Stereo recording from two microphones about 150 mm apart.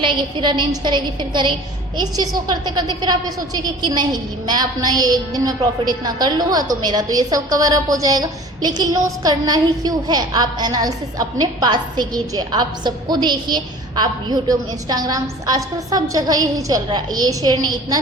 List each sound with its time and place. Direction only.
0.0 s a woman's voice: 30° right (ahead or behind)